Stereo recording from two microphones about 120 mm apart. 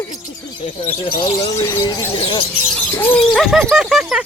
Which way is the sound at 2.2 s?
45° left (ahead or behind).